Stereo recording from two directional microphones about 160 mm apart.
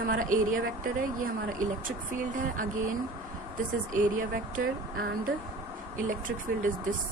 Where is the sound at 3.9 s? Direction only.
55° right (ahead or behind).